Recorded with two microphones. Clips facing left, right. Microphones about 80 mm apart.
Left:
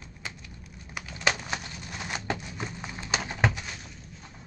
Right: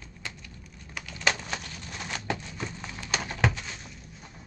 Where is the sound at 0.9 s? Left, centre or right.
Centre.